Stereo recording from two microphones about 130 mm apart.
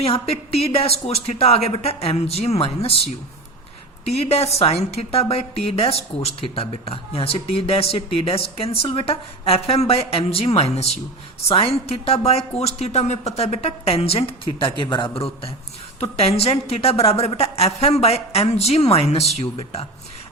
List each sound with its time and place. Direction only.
0.0 s a woman's voice: 50° left (ahead or behind)
4.0 s a woman's voice: 50° left (ahead or behind)